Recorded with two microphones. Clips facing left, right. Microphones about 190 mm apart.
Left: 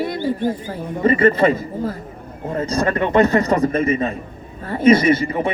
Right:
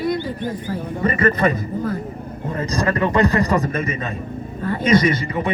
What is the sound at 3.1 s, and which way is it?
A man's voice, 25° left (ahead or behind).